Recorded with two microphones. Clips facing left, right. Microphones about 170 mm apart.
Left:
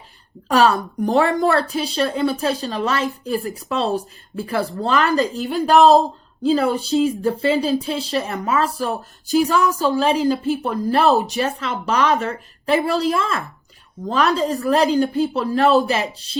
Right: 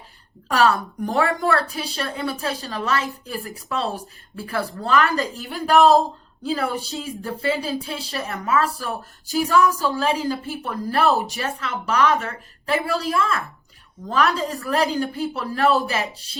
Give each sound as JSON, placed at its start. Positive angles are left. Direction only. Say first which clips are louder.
{"t": 0.4, "sound": "speech", "louder": "left 3 dB", "side_deg": 20}